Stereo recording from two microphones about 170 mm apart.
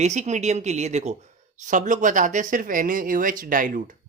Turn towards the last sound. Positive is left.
turn(degrees=-50)  # may be behind; listen again after turning